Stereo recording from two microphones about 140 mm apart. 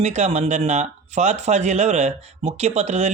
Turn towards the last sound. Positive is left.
turn(degrees=-55)  # may be behind; listen again after turning